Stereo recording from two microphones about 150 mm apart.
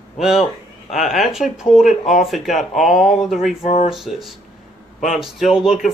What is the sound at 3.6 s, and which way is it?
Speech, 45° left (ahead or behind).